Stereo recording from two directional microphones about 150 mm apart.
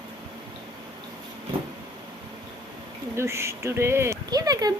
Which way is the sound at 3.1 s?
15° right (ahead or behind).